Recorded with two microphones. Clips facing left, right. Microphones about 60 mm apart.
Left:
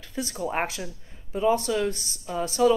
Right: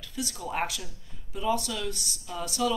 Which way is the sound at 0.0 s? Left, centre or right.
Left.